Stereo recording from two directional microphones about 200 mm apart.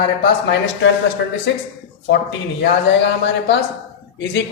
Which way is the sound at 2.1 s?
60° left (ahead or behind).